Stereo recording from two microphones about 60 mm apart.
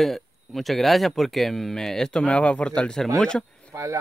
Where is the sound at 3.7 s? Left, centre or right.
Right.